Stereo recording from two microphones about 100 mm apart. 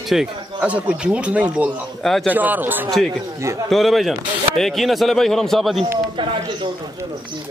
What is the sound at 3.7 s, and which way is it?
A man's voice, centre (ahead or behind).